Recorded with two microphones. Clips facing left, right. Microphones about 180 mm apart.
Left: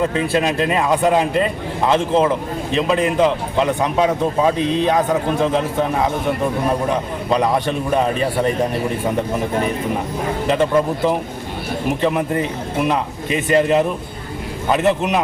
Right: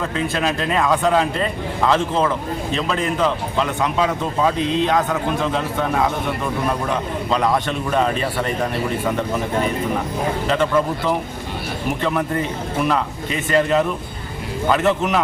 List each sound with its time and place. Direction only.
0.4 s a man's voice: 15° left (ahead or behind)
7.3 s a man's voice: 15° left (ahead or behind)
10.4 s a man's voice: 15° left (ahead or behind)